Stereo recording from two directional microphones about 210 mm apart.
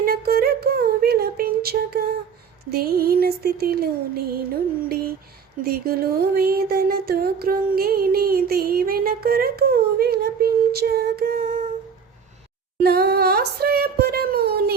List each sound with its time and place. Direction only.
0.0 s a sound: 45° right (ahead or behind)
2.6 s music: 45° right (ahead or behind)
12.8 s music: 50° right (ahead or behind)